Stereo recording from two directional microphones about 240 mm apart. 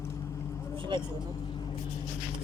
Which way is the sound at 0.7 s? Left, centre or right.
Centre.